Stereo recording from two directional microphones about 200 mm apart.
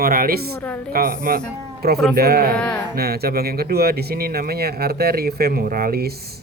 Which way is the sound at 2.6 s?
5° left (ahead or behind).